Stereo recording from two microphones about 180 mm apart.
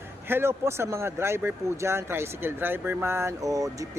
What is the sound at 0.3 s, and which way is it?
Speech, 15° right (ahead or behind).